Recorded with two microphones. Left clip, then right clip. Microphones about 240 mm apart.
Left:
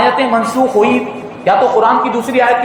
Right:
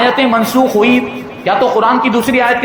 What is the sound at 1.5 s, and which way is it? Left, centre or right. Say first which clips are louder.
Speech: left 2 dB; right.